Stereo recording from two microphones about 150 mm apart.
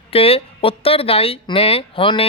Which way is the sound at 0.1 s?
40° left (ahead or behind).